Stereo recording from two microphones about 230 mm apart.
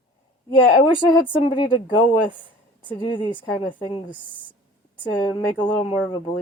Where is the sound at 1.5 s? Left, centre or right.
Left.